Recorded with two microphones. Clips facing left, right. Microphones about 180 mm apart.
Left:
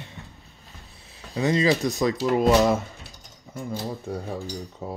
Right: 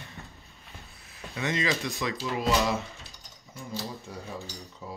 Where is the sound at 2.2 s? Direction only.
50° left (ahead or behind).